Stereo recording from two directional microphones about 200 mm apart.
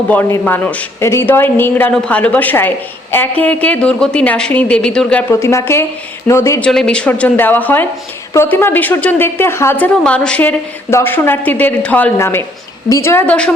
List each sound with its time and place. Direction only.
0.1 s a woman's voice: 10° left (ahead or behind)